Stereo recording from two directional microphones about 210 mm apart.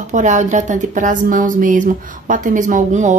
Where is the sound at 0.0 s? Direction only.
35° right (ahead or behind).